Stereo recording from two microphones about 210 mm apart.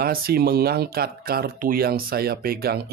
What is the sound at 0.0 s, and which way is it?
Speech, 45° right (ahead or behind).